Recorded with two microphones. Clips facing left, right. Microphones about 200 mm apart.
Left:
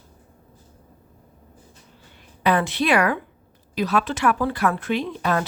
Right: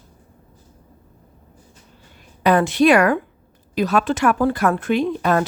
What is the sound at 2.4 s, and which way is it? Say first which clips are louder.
A woman's voice: right 6 dB; 45° right (ahead or behind).